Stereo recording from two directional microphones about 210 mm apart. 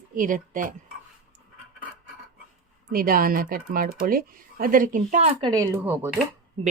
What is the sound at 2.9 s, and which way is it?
Speech, 45° right (ahead or behind).